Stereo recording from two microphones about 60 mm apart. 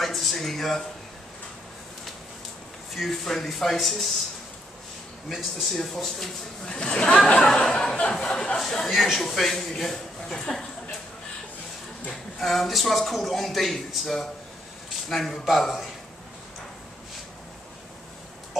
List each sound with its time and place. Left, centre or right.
0.0 s a sound: centre
2.9 s a man's voice: centre
5.3 s a man's voice: centre
12.1 s a man's voice: centre